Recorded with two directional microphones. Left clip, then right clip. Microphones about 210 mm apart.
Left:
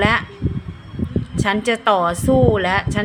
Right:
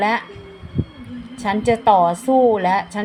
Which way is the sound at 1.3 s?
20° left (ahead or behind).